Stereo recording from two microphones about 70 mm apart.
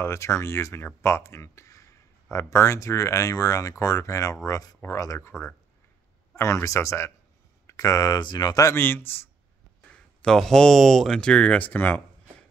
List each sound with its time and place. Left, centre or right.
0.0 s speech: left
8.7 s speech: left
10.2 s speech: centre; by 12.0 s left